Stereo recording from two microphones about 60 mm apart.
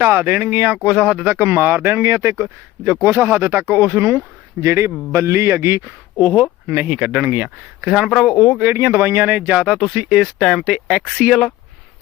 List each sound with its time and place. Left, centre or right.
0.0 s speech: right
1.5 s speech: right
5.8 s speech: right
7.9 s speech: centre
8.6 s speech: right
9.6 s speech: centre
10.4 s speech: centre